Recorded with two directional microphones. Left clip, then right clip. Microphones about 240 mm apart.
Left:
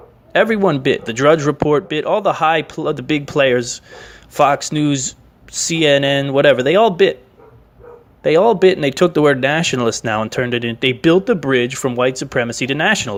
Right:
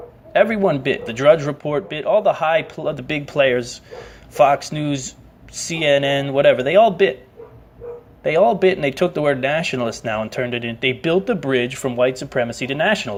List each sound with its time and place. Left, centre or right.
0.3 s speech: left
8.2 s speech: left